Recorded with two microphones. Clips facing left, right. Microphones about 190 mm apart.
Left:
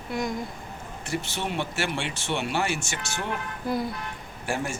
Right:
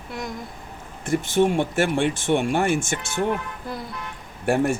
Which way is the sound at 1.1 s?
50° right (ahead or behind).